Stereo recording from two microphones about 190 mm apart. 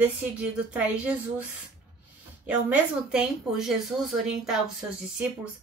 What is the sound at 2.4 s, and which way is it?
Speech, 5° right (ahead or behind).